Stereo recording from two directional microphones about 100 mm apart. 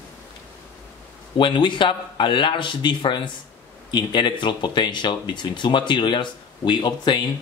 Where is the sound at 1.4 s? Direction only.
55° left (ahead or behind).